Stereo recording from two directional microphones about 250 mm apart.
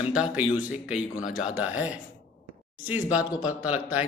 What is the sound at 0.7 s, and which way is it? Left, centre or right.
Speech, left.